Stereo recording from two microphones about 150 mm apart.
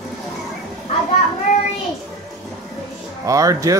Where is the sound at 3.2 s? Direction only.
20° right (ahead or behind).